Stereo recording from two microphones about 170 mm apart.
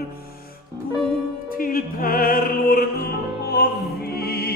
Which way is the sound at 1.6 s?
55° left (ahead or behind).